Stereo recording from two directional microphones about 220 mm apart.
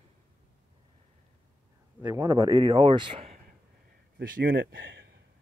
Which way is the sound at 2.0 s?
10° right (ahead or behind).